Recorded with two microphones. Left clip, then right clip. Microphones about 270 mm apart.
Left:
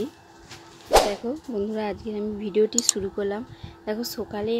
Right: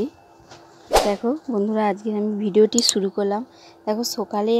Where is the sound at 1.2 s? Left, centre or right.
Right.